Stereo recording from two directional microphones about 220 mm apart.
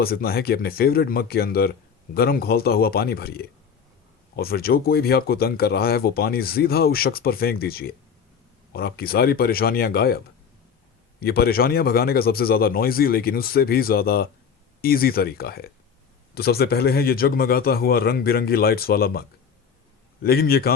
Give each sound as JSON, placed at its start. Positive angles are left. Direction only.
{"t": 0.0, "sound": "speech", "side_deg": 45}
{"t": 11.2, "sound": "speech", "side_deg": 45}
{"t": 20.2, "sound": "speech", "side_deg": 45}